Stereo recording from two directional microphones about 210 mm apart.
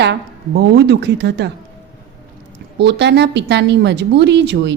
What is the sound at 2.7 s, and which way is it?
A woman's voice, 55° right (ahead or behind).